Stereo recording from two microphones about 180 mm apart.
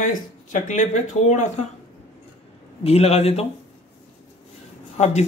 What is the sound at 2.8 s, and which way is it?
Speech, 35° left (ahead or behind).